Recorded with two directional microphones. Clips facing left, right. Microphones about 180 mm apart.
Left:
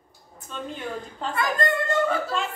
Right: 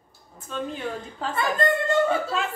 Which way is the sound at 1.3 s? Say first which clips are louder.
Right 1 dB; 25° right (ahead or behind).